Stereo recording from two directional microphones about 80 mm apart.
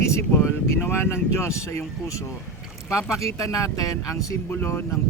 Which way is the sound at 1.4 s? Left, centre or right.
Left.